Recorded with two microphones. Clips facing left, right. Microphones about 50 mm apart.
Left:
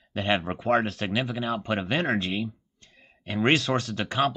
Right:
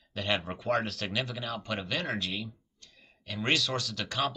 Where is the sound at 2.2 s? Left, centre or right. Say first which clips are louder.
Left 6 dB; left.